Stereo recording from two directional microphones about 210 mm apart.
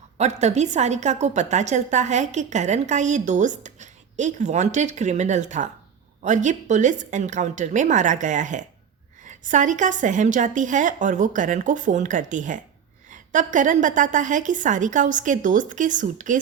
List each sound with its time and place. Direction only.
0.2 s a woman's voice: 30° right (ahead or behind)